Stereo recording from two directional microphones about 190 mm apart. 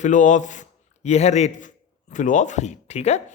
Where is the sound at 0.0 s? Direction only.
40° left (ahead or behind).